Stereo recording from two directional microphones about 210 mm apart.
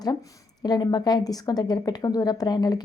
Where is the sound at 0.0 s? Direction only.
20° left (ahead or behind).